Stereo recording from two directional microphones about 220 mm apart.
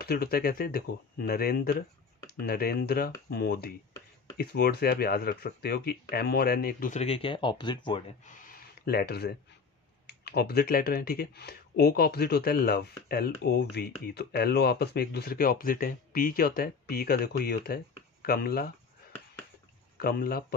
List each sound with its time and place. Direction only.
0.0 s speech: 45° left (ahead or behind); by 8.0 s 20° left (ahead or behind)
8.3 s a sound: 35° left (ahead or behind)
10.0 s speech: 45° left (ahead or behind)
20.0 s speech: 45° left (ahead or behind)